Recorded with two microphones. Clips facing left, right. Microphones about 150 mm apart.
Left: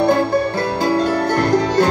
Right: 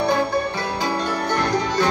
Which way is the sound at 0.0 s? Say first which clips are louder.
Left 5 dB; 50° left (ahead or behind).